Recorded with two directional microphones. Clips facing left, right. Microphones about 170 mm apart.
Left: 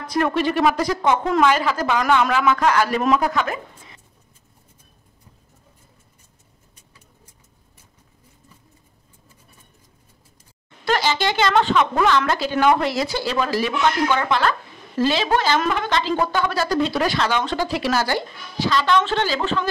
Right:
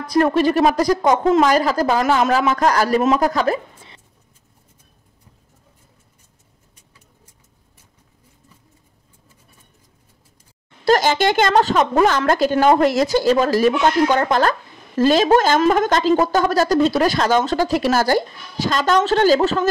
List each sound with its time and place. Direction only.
0.0 s speech: 35° right (ahead or behind)
10.9 s speech: 50° right (ahead or behind)